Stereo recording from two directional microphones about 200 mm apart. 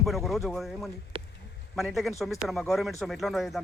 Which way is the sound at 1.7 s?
Centre (ahead or behind).